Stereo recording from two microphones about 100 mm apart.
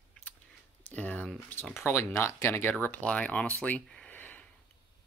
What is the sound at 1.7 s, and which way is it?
Speech, 25° left (ahead or behind).